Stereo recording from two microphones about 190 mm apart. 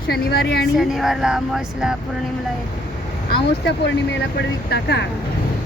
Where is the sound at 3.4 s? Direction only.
65° left (ahead or behind).